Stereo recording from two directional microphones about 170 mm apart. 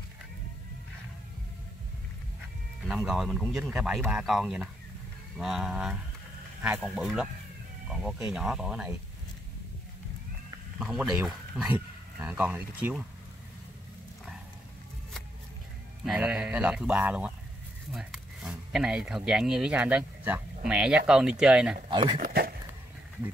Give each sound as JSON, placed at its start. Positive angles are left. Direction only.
{"t": 3.1, "sound": "speech", "side_deg": 0}
{"t": 10.8, "sound": "speech", "side_deg": -5}
{"t": 16.1, "sound": "speech", "side_deg": -5}
{"t": 21.9, "sound": "speech", "side_deg": -30}
{"t": 22.2, "sound": "speech", "side_deg": -60}